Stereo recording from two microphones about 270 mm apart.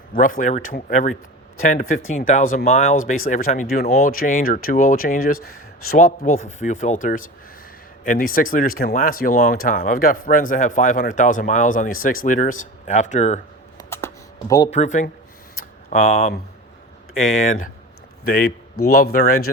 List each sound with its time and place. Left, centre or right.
0.1 s speech: left
13.7 s a sound: centre
14.5 s speech: left
18.3 s speech: left